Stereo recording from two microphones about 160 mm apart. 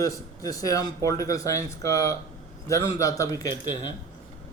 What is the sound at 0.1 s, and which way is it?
A man's voice, 20° left (ahead or behind).